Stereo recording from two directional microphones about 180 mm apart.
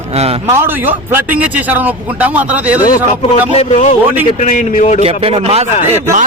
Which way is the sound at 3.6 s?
35° left (ahead or behind).